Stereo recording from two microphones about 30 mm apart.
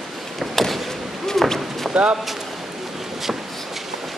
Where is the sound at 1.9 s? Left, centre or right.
Centre.